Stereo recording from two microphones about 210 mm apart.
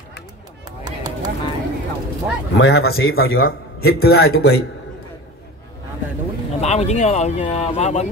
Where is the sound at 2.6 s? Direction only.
50° left (ahead or behind).